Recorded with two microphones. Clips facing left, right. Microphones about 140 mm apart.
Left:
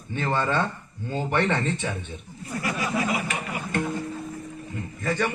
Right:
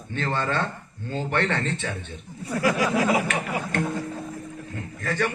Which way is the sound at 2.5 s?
90° right.